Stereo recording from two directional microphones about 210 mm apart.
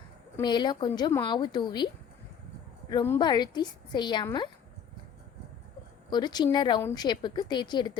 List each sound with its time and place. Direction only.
0.3 s speech: 20° left (ahead or behind)
2.9 s speech: 15° left (ahead or behind)
6.1 s speech: 20° left (ahead or behind)